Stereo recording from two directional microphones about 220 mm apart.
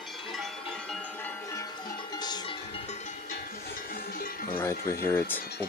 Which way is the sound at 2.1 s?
20° left (ahead or behind).